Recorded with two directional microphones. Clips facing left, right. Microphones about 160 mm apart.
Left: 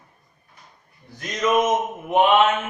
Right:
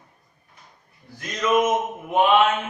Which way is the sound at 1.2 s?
20° left (ahead or behind).